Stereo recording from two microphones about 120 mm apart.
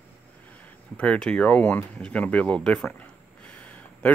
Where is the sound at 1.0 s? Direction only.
10° left (ahead or behind).